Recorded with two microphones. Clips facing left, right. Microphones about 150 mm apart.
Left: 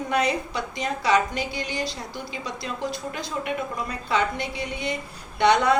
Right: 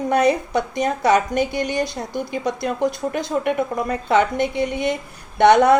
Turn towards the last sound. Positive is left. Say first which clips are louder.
# right 7 dB
turn(degrees=-50)  # may be behind; listen again after turning